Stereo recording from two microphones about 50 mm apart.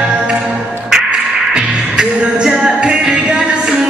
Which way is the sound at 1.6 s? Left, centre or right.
Centre.